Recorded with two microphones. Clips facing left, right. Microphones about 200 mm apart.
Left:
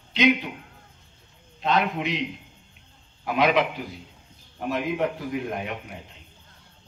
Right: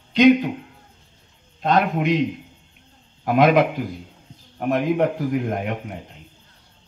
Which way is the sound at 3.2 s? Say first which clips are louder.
Right 6 dB; 45° right (ahead or behind).